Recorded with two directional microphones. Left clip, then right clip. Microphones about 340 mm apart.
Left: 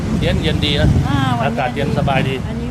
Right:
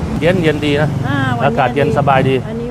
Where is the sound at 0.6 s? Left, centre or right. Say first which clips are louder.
Right 3 dB; right.